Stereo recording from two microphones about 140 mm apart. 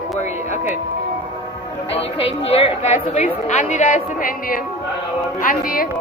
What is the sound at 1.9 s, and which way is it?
A woman's voice, 45° left (ahead or behind).